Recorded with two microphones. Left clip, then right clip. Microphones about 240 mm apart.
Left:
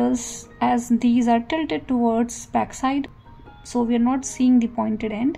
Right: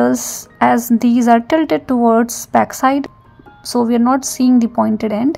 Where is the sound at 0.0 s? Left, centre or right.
Right.